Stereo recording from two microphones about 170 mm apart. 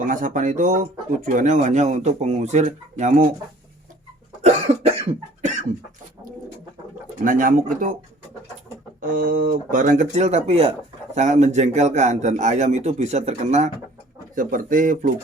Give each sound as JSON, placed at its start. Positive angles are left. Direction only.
{"t": 0.0, "sound": "speech", "side_deg": -50}
{"t": 4.4, "sound": "cough", "side_deg": -40}
{"t": 7.3, "sound": "speech", "side_deg": -50}
{"t": 9.0, "sound": "speech", "side_deg": -55}
{"t": 14.3, "sound": "speech", "side_deg": -55}